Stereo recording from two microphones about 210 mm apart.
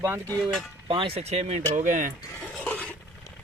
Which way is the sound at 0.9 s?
25° right (ahead or behind).